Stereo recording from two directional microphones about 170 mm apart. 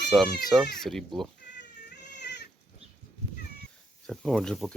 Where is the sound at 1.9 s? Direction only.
80° left.